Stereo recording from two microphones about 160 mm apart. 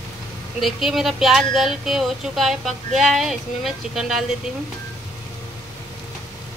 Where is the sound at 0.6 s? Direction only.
Centre (ahead or behind).